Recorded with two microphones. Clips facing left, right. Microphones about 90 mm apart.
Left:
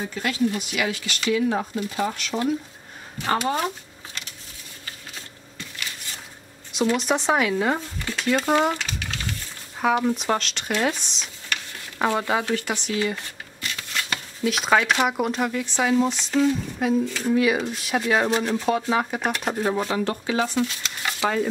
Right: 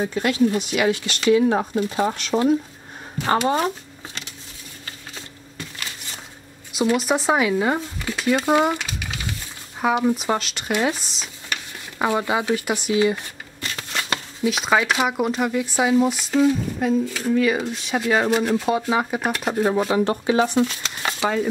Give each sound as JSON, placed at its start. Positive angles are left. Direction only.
{"t": 0.0, "sound": "speech", "side_deg": -25}
{"t": 6.7, "sound": "speech", "side_deg": -5}
{"t": 13.6, "sound": "shuffling cards", "side_deg": -35}
{"t": 14.4, "sound": "speech", "side_deg": 0}
{"t": 20.0, "sound": "speech", "side_deg": -20}
{"t": 21.2, "sound": "speech", "side_deg": -5}